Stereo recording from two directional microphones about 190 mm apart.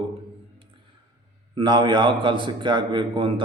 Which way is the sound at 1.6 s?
25° right (ahead or behind).